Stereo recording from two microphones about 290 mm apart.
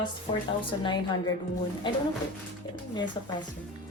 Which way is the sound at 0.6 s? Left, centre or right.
Centre.